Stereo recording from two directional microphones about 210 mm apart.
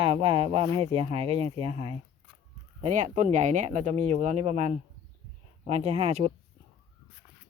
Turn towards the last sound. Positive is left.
turn(degrees=-30)  # may be behind; listen again after turning